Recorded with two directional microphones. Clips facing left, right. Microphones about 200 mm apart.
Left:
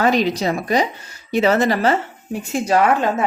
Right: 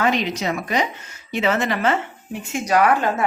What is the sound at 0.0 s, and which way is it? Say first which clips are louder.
A woman's voice: left 4 dB; 40° left (ahead or behind).